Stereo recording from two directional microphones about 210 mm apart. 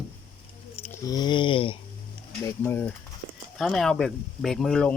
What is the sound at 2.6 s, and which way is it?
Speech, 10° left (ahead or behind).